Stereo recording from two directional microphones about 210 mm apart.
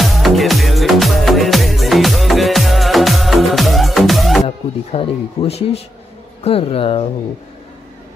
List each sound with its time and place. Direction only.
0.0 s music: centre (ahead or behind)
4.5 s speech: 25° left (ahead or behind)